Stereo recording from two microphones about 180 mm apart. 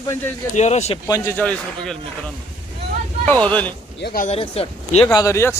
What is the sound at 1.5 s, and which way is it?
Speech, 5° left (ahead or behind).